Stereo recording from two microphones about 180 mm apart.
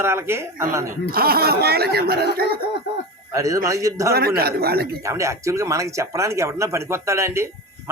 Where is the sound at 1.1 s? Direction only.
55° right (ahead or behind).